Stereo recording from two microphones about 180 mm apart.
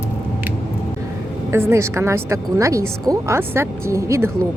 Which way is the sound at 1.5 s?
15° right (ahead or behind).